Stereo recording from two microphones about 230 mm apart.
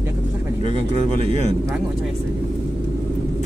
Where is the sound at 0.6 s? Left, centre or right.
Right.